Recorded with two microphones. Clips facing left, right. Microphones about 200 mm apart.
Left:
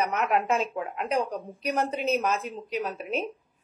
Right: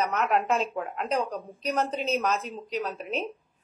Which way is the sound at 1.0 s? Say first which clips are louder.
Left 1 dB; 15° left (ahead or behind).